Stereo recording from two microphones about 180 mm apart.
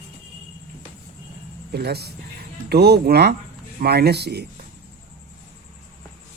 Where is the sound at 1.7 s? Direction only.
65° right (ahead or behind).